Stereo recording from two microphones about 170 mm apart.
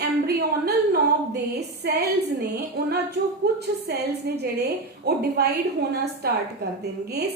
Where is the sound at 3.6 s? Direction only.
70° right (ahead or behind).